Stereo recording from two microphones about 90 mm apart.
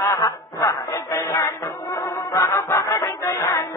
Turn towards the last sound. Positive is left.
turn(degrees=35)  # may be behind; listen again after turning